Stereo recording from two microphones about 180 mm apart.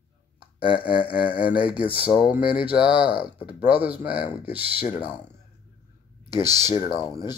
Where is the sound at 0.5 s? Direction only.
30° left (ahead or behind).